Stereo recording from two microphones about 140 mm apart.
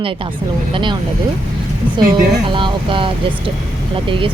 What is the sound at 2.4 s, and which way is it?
Speech, 35° right (ahead or behind).